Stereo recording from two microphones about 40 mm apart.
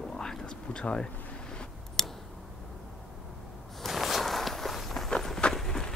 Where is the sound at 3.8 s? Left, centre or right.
Centre.